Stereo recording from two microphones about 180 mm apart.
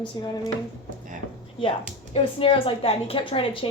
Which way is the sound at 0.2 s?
20° left (ahead or behind).